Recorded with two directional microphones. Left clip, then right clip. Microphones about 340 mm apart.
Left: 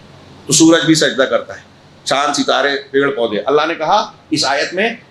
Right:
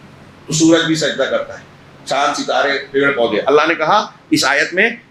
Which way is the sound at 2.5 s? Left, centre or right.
Left.